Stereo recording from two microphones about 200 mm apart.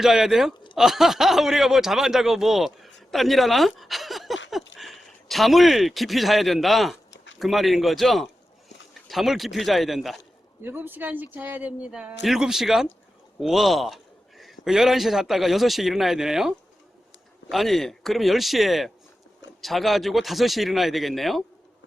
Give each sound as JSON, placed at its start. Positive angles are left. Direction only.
{"t": 0.0, "sound": "a man's voice", "side_deg": 0}